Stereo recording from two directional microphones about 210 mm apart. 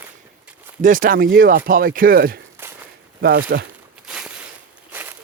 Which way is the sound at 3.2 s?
45° right (ahead or behind).